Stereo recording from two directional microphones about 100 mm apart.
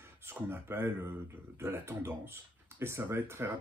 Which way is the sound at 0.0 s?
25° right (ahead or behind).